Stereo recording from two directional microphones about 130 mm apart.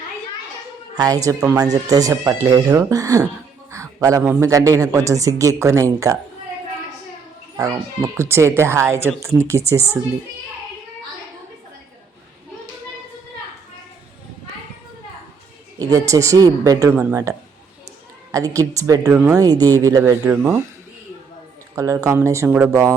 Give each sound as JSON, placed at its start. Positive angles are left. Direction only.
{"t": 0.9, "sound": "speech", "side_deg": -25}
{"t": 3.7, "sound": "a sound", "side_deg": -25}
{"t": 4.3, "sound": "speech", "side_deg": -25}
{"t": 7.6, "sound": "speech", "side_deg": -20}
{"t": 15.8, "sound": "speech", "side_deg": -30}
{"t": 16.9, "sound": "speech", "side_deg": -15}
{"t": 20.2, "sound": "speech", "side_deg": -15}
{"t": 21.8, "sound": "speech", "side_deg": -25}